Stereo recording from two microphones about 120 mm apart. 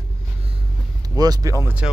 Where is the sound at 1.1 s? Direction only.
35° right (ahead or behind).